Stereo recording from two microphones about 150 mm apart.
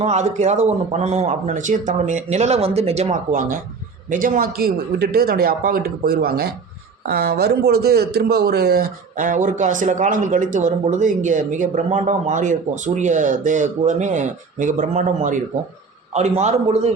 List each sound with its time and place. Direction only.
0.0 s speech: 50° right (ahead or behind)